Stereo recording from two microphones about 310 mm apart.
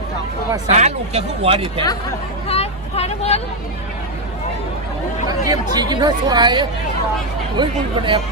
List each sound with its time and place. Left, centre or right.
0.7 s speech: right
2.4 s speech: centre
5.4 s speech: centre